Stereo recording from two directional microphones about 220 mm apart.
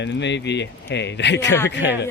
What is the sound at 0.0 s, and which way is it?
Speech, 55° left (ahead or behind).